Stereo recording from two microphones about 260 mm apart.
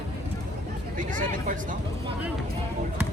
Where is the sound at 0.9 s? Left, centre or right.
Right.